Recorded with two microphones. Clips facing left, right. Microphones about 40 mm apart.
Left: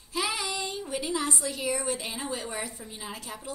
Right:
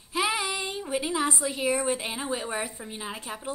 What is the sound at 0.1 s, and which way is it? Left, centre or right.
A child's voice, right.